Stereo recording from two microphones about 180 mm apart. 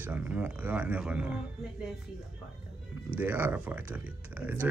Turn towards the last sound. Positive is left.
turn(degrees=-10)  # may be behind; listen again after turning